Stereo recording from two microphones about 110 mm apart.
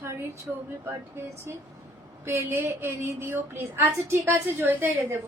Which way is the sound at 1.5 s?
25° right (ahead or behind).